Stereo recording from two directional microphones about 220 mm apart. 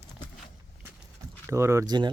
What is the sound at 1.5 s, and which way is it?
Speech, 15° right (ahead or behind).